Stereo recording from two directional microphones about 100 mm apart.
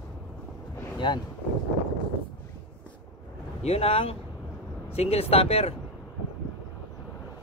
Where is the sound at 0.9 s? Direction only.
50° left (ahead or behind).